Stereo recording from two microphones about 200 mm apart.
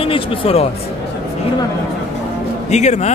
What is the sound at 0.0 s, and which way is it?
Speech, 25° left (ahead or behind).